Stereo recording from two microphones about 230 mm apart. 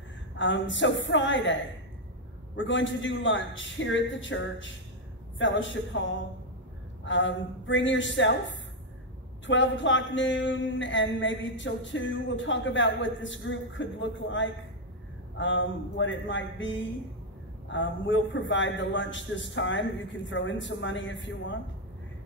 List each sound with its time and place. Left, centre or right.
0.4 s speech: left
7.1 s speech: left
9.5 s speech: left